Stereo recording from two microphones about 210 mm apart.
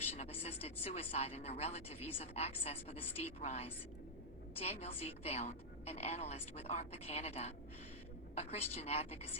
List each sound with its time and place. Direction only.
0.4 s a woman's voice: 30° left (ahead or behind)